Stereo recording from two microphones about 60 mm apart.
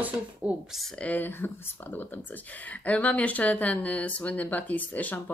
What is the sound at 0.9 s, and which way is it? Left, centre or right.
Speech, left.